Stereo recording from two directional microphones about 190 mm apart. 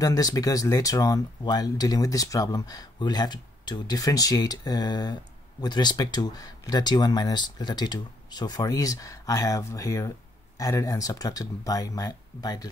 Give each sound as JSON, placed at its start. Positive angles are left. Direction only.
{"t": 0.0, "sound": "speech", "side_deg": 20}